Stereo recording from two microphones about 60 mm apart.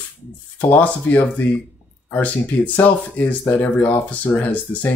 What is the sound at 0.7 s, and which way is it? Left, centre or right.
Speech, left.